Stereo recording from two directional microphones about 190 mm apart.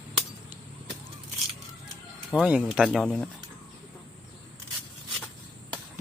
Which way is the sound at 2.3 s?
5° right (ahead or behind).